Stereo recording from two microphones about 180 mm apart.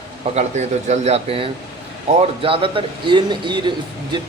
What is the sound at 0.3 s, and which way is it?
Speech, 40° right (ahead or behind).